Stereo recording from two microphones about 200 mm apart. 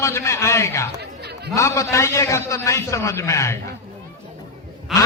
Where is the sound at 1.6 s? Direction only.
15° left (ahead or behind).